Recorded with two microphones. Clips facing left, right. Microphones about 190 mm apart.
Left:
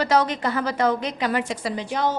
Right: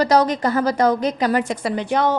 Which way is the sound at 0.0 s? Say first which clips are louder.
Right 4 dB; 40° right (ahead or behind).